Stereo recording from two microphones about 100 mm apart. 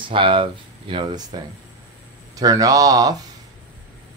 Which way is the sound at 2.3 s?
35° right (ahead or behind).